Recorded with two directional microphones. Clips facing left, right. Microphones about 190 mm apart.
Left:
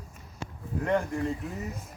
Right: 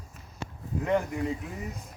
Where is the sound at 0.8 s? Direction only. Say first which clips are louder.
Even; 5° right (ahead or behind).